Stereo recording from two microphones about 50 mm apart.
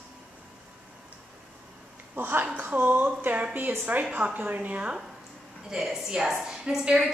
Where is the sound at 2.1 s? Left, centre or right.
Right.